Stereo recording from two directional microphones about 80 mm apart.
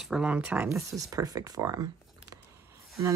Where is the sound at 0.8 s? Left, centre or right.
Right.